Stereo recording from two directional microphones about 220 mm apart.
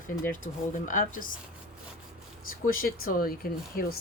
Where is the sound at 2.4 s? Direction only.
40° left (ahead or behind).